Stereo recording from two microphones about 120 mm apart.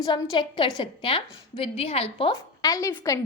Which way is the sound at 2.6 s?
30° left (ahead or behind).